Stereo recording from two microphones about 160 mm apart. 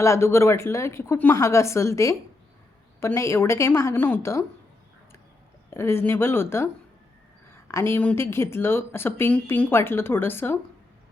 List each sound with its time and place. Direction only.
0.0 s speech: 15° left (ahead or behind)
5.7 s speech: 15° left (ahead or behind)